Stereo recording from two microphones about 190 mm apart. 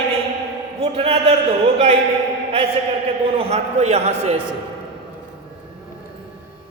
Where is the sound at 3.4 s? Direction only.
35° right (ahead or behind).